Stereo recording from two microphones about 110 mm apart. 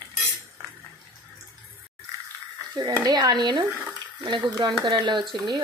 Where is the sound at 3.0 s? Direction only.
40° right (ahead or behind).